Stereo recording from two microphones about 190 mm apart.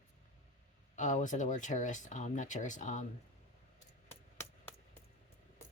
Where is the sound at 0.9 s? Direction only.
40° left (ahead or behind).